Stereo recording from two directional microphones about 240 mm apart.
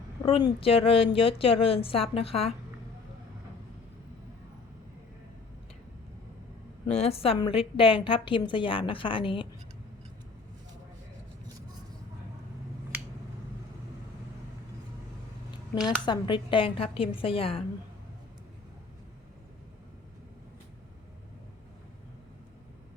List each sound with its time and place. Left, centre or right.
0.2 s a woman's voice: left
6.8 s a woman's voice: left
16.0 s a woman's voice: centre